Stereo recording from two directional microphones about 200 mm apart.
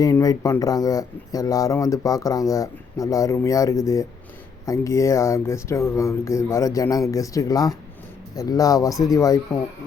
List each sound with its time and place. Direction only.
0.0 s speech: 15° left (ahead or behind)